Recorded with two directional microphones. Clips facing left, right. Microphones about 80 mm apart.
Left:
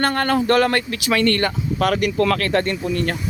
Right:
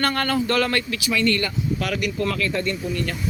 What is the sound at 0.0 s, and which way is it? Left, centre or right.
Speech, left.